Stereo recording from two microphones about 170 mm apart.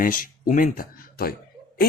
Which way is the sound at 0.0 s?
55° left (ahead or behind).